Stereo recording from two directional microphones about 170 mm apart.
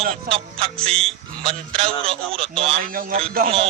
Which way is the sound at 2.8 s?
55° right (ahead or behind).